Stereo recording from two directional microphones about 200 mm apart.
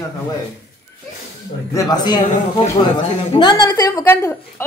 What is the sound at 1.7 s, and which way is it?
Speech, 15° left (ahead or behind).